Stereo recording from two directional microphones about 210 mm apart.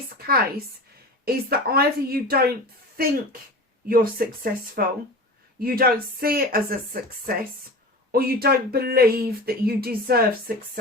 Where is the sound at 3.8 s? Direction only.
45° right (ahead or behind).